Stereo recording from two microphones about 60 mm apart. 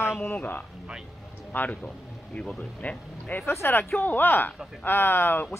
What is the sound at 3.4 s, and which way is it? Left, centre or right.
Speech, left.